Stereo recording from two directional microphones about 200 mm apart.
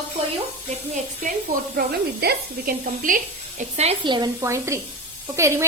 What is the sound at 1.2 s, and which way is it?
A woman's voice, 40° right (ahead or behind).